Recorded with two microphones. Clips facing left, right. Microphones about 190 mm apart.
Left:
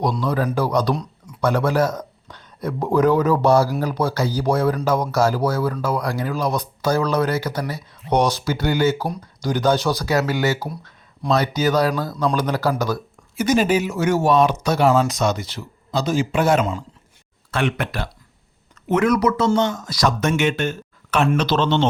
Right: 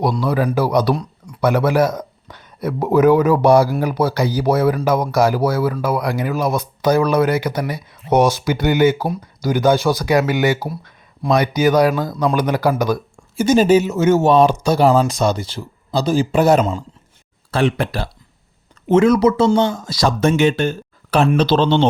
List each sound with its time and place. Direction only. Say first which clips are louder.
0.0 s speech: right 3 dB; 10° right (ahead or behind)
13.3 s speech: right 5 dB; 30° right (ahead or behind)